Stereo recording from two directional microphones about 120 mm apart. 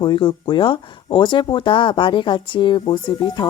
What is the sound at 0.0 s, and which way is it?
Speech, 40° left (ahead or behind).